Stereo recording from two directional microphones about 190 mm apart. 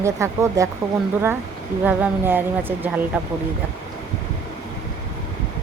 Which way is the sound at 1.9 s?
10° right (ahead or behind).